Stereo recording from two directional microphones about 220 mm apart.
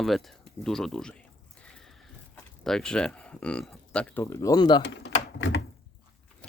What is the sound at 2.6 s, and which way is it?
Speech, 5° left (ahead or behind).